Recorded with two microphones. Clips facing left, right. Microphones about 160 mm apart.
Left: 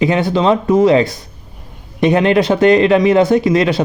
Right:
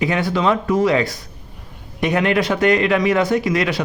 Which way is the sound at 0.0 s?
25° left (ahead or behind).